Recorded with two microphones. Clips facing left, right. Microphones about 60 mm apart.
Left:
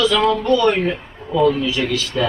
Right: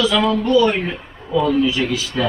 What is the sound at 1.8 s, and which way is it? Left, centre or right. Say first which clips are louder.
Speech: left 1 dB; centre.